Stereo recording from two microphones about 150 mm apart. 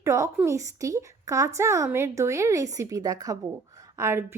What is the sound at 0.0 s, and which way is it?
A woman's voice, 20° right (ahead or behind).